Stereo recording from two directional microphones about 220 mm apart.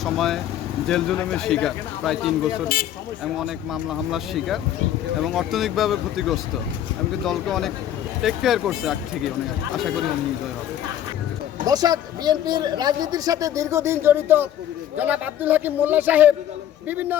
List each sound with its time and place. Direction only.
0.0 s speech: centre (ahead or behind)
3.4 s speech: centre (ahead or behind)
11.6 s speech: 15° right (ahead or behind)